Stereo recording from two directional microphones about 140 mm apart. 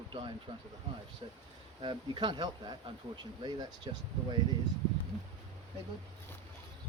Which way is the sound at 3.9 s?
35° right (ahead or behind).